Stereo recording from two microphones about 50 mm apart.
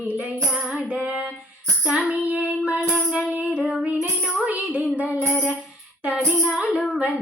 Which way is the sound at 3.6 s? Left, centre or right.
Centre.